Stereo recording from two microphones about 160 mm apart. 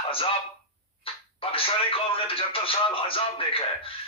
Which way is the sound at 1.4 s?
35° left (ahead or behind).